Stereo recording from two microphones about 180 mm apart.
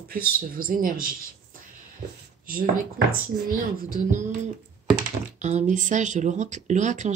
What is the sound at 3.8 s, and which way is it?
Speech, 50° right (ahead or behind).